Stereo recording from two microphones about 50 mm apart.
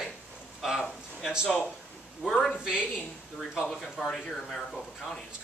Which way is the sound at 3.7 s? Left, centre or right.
Centre.